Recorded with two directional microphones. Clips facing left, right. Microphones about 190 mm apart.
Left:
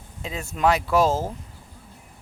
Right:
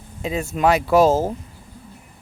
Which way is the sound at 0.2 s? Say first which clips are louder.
Right 4 dB; 10° right (ahead or behind).